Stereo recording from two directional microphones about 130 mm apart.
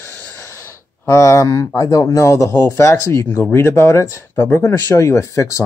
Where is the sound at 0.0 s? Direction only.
15° left (ahead or behind).